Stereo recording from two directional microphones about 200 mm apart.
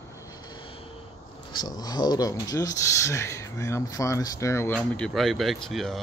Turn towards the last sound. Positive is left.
turn(degrees=0)  # may be behind; listen again after turning